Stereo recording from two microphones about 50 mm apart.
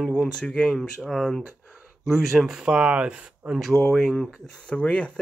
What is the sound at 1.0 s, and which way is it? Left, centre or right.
Speech, centre.